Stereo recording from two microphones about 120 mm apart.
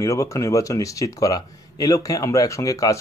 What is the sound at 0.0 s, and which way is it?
Speech, 25° left (ahead or behind).